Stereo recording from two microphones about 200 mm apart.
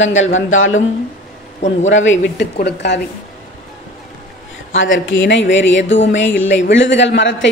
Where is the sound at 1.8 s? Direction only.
70° left (ahead or behind).